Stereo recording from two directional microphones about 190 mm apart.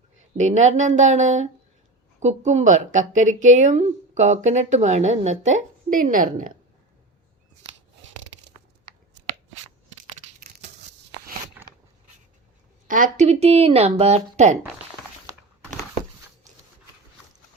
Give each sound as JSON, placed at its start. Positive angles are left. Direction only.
{"t": 0.3, "sound": "a woman's voice", "side_deg": -40}
{"t": 10.6, "sound": "a sound", "side_deg": -35}
{"t": 12.9, "sound": "a woman's voice", "side_deg": -40}